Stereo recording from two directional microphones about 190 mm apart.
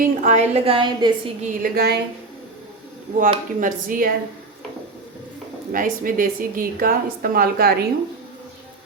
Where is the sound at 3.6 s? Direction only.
45° right (ahead or behind).